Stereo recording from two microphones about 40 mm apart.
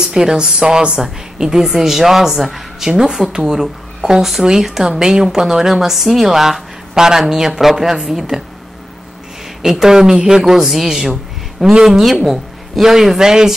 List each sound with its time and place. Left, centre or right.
0.0 s speech: centre
9.6 s speech: centre